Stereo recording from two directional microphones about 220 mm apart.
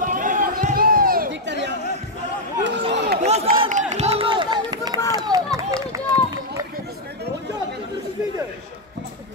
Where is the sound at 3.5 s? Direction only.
30° right (ahead or behind).